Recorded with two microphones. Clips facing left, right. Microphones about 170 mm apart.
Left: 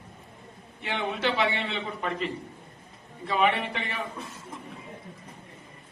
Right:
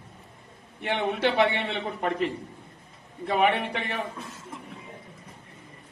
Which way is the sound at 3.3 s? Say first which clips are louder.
Right 2 dB; 55° right (ahead or behind).